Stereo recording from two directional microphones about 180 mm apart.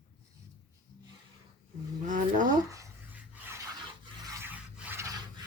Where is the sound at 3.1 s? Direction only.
10° right (ahead or behind).